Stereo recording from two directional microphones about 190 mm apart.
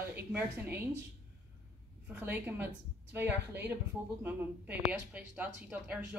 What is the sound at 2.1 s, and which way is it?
A woman's voice, 10° right (ahead or behind).